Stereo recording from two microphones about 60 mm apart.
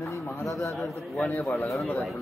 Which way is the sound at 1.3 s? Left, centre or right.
Left.